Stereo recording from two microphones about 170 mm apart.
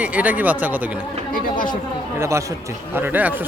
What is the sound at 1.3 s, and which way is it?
Chatter, 55° left (ahead or behind).